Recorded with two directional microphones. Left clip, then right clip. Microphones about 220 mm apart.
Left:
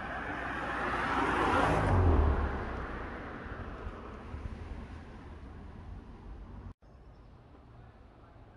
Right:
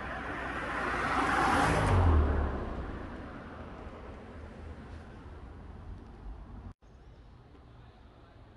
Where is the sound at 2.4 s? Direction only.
25° left (ahead or behind).